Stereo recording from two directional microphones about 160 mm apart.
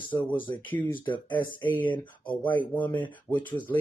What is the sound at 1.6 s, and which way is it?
Speech, 10° left (ahead or behind).